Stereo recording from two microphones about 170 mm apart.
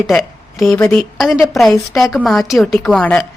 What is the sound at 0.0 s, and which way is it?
A woman's voice, centre (ahead or behind).